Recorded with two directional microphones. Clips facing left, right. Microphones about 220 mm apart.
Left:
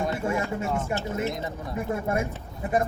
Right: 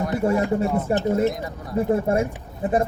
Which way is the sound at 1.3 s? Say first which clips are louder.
Right 1 dB; 25° left (ahead or behind).